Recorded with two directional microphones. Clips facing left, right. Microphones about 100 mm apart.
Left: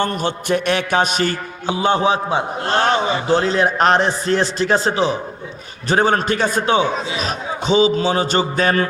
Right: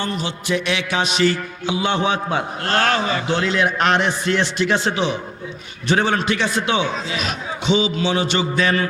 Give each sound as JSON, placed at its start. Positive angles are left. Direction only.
{"t": 0.0, "sound": "mantra", "side_deg": 50}
{"t": 3.2, "sound": "mantra", "side_deg": 35}
{"t": 5.9, "sound": "a man's voice", "side_deg": 40}
{"t": 7.1, "sound": "mantra", "side_deg": 35}